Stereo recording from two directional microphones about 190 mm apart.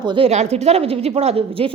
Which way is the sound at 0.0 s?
25° right (ahead or behind).